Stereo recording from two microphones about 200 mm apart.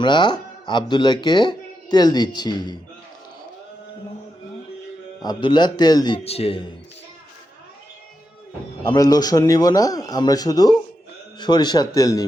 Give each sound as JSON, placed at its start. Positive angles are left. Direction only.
{"t": 0.0, "sound": "speech", "side_deg": 20}
{"t": 5.2, "sound": "speech", "side_deg": 20}
{"t": 8.8, "sound": "a man's voice", "side_deg": 20}